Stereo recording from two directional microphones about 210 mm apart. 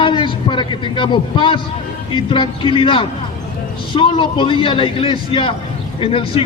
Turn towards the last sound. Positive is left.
turn(degrees=25)  # may be behind; listen again after turning